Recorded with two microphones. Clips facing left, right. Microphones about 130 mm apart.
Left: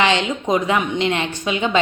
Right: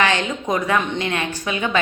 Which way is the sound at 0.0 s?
20° left (ahead or behind).